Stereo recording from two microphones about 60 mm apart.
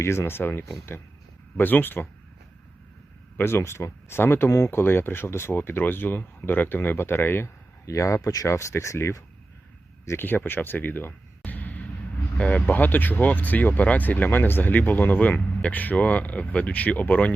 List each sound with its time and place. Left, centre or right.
0.0 s speech: left
3.3 s speech: left
7.9 s speech: left
8.4 s speech: left
10.2 s speech: left